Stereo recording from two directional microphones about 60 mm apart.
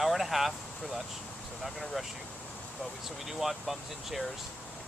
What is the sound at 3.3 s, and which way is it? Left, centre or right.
Speech, centre.